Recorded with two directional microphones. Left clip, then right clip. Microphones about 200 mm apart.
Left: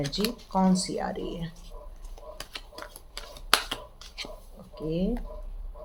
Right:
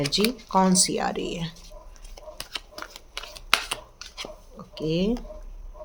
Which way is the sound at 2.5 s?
20° right (ahead or behind).